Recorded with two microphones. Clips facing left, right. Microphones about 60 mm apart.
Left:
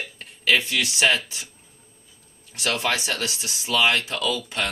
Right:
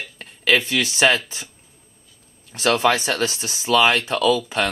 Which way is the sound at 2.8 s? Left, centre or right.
Right.